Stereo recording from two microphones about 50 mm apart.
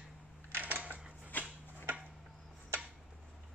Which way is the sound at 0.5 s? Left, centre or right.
Right.